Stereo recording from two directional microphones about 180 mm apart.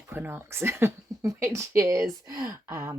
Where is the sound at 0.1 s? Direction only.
10° right (ahead or behind).